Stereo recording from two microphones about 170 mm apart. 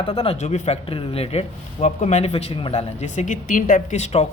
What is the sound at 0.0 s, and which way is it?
Speech, 35° left (ahead or behind).